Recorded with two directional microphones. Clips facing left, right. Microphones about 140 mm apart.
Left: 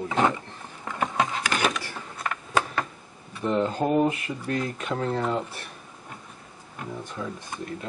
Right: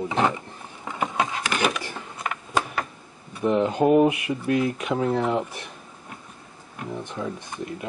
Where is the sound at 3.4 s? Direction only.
10° right (ahead or behind).